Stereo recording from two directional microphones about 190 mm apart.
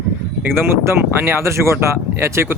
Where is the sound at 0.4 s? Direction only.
10° right (ahead or behind).